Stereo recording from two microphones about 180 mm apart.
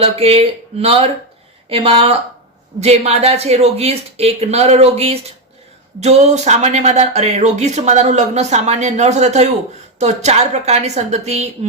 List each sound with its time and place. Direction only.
0.0 s speech: 35° right (ahead or behind)